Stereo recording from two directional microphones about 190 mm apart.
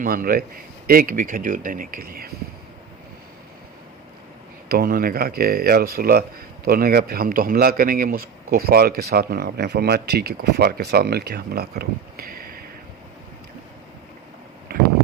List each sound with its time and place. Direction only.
0.0 s a man's voice: 50° right (ahead or behind)
4.7 s a man's voice: 50° right (ahead or behind)